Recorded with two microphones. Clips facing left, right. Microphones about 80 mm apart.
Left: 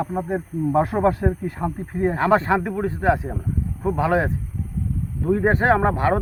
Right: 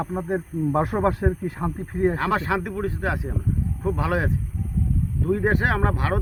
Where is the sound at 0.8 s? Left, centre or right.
Centre.